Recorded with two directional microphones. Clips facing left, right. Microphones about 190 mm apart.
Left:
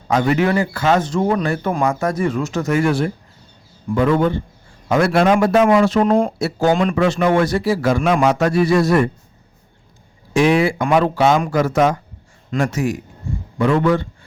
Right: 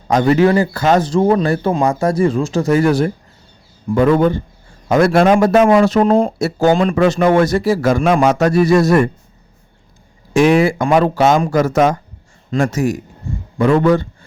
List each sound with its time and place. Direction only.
0.1 s a man's voice: 35° right (ahead or behind)
10.3 s a man's voice: 45° right (ahead or behind)